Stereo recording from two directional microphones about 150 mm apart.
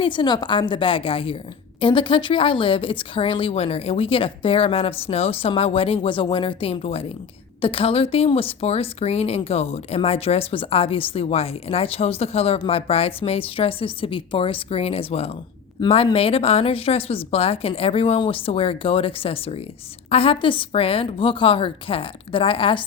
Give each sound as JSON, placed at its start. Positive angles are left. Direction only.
{"t": 0.0, "sound": "speech", "side_deg": 35}